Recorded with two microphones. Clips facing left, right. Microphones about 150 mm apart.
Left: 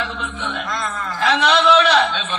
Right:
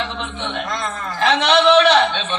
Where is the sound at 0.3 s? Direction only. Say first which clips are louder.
Right 1 dB; 25° right (ahead or behind).